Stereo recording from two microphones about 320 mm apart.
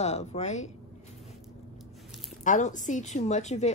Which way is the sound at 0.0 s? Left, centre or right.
Centre.